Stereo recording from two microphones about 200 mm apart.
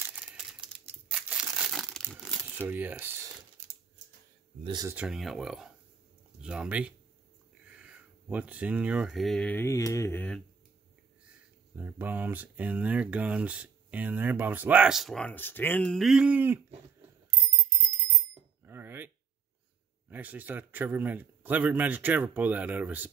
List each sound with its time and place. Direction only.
0.1 s typing: 5° right (ahead or behind)
1.3 s crumpling: 5° right (ahead or behind)
2.5 s speech: 10° right (ahead or behind)
4.6 s speech: 20° right (ahead or behind)
4.9 s speech: 5° right (ahead or behind)
11.7 s speech: 10° right (ahead or behind)
18.7 s cutlery: 10° right (ahead or behind)
20.1 s speech: 10° right (ahead or behind)